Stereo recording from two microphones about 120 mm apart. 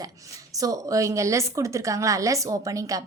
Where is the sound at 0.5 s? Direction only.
30° right (ahead or behind).